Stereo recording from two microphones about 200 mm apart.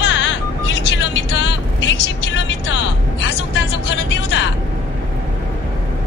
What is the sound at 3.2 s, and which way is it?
Music, 65° left (ahead or behind).